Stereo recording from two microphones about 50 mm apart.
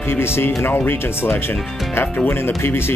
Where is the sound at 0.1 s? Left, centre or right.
Left.